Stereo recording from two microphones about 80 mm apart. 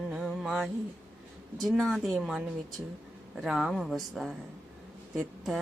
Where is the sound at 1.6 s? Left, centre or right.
Centre.